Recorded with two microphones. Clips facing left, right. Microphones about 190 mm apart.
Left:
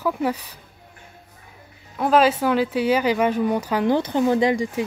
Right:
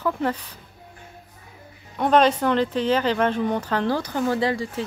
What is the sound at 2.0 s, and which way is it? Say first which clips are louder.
Speech: left 1 dB; 5° left (ahead or behind).